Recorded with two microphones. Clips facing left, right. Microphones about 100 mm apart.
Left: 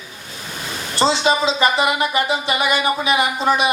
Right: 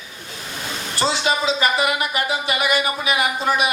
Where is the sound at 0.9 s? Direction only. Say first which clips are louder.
Left 4 dB; 25° left (ahead or behind).